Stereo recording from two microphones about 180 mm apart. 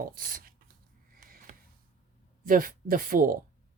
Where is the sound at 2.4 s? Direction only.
50° right (ahead or behind).